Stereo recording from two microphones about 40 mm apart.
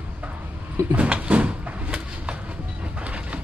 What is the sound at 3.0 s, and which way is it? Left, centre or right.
Train, right.